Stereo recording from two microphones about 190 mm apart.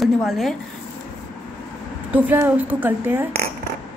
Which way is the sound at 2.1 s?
10° right (ahead or behind).